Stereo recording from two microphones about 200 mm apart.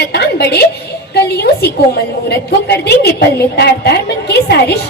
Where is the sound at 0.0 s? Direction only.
55° left (ahead or behind).